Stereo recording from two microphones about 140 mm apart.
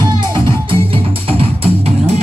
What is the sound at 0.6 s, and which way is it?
Music, 40° right (ahead or behind).